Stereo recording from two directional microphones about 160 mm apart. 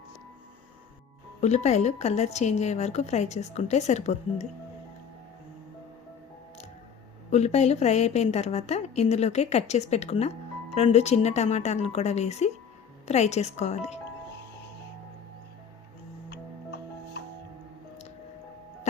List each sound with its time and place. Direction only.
1.4 s a woman's voice: 45° left (ahead or behind)
7.3 s a woman's voice: 45° left (ahead or behind)